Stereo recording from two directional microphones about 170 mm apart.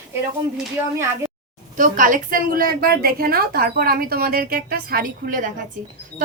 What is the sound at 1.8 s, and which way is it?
A woman's voice, 50° right (ahead or behind).